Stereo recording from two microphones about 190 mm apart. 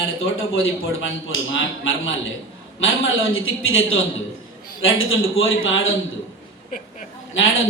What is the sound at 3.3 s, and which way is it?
Speech, 90° left.